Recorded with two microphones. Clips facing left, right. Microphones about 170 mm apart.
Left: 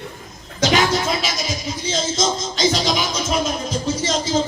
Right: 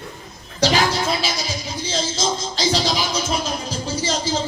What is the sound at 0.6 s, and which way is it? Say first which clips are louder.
Music: left 1 dB; 30° right (ahead or behind).